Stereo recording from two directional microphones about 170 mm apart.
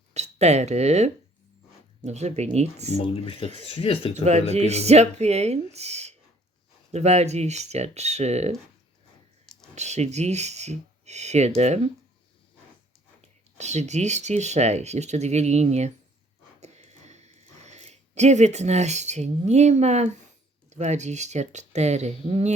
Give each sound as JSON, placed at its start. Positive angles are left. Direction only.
{"t": 0.1, "sound": "speech", "side_deg": -40}
{"t": 3.0, "sound": "speech", "side_deg": 30}
{"t": 4.1, "sound": "speech", "side_deg": -40}
{"t": 9.7, "sound": "speech", "side_deg": -40}
{"t": 13.6, "sound": "speech", "side_deg": -40}
{"t": 16.6, "sound": "a sound", "side_deg": -40}
{"t": 20.7, "sound": "speech", "side_deg": -40}